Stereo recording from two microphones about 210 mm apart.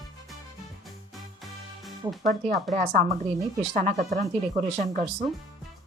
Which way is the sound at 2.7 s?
35° right (ahead or behind).